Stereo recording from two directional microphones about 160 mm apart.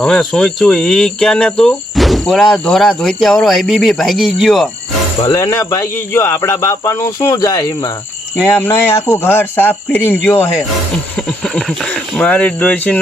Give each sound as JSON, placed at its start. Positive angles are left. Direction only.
{"t": 0.0, "sound": "speech", "side_deg": 5}
{"t": 5.2, "sound": "speech", "side_deg": 25}
{"t": 8.4, "sound": "speech", "side_deg": 15}